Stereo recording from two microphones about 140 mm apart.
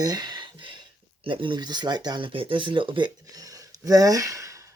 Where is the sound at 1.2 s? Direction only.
35° right (ahead or behind).